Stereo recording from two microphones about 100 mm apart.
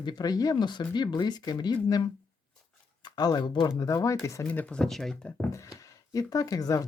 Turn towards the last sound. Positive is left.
turn(degrees=40)  # may be behind; listen again after turning